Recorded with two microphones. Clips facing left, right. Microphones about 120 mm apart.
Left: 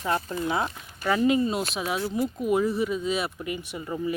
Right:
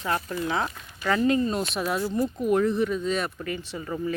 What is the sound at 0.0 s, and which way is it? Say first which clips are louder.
Speech: left 1 dB; 25° left (ahead or behind).